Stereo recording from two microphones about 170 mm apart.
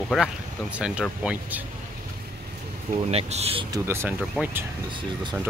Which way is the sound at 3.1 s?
35° right (ahead or behind).